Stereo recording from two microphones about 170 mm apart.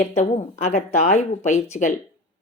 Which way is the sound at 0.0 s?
40° left (ahead or behind).